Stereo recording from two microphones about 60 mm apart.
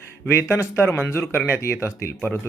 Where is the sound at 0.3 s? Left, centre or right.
Left.